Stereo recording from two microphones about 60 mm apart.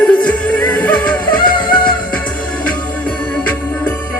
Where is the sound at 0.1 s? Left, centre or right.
Left.